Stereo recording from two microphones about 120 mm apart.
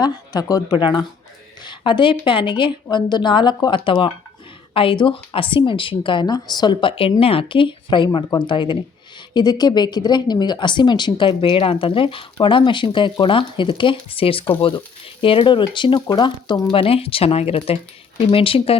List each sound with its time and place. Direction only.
0.0 s speech: 30° left (ahead or behind)
16.7 s speech: 50° left (ahead or behind)